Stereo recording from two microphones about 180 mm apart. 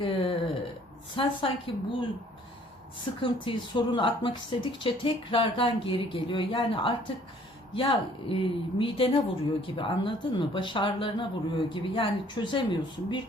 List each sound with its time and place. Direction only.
0.0 s speech: 30° left (ahead or behind)
3.0 s speech: 30° left (ahead or behind)